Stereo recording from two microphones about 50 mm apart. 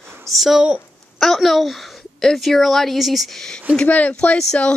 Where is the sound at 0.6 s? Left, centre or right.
Centre.